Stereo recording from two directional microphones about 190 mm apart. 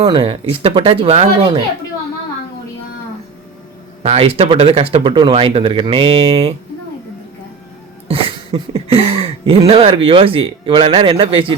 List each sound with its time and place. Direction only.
0.0 s speech: 25° right (ahead or behind)
4.0 s speech: 35° right (ahead or behind)
8.0 s a sound: 30° right (ahead or behind)
9.6 s speech: 30° right (ahead or behind)